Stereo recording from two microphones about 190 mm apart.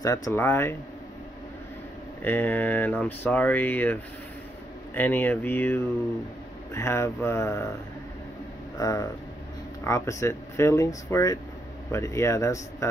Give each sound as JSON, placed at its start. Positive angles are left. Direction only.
{"t": 0.0, "sound": "speech", "side_deg": 15}
{"t": 2.2, "sound": "speech", "side_deg": 10}
{"t": 8.7, "sound": "speech", "side_deg": 20}